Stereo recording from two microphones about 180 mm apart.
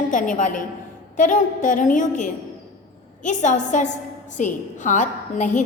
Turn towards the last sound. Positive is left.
turn(degrees=40)  # may be behind; listen again after turning